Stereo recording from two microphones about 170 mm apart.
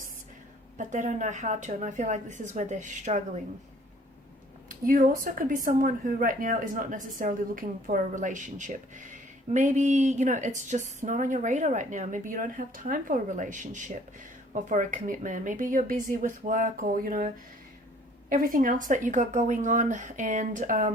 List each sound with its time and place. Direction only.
0.8 s speech: 45° right (ahead or behind)
4.7 s speech: 50° right (ahead or behind)
18.3 s speech: 55° right (ahead or behind)